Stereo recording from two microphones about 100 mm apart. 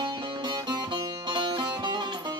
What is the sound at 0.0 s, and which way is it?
Music, 50° right (ahead or behind).